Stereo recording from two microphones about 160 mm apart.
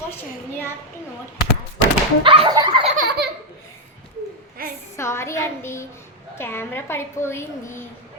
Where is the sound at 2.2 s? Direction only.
35° right (ahead or behind).